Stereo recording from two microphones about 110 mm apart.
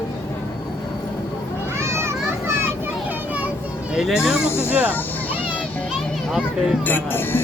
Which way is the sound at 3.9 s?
5° right (ahead or behind).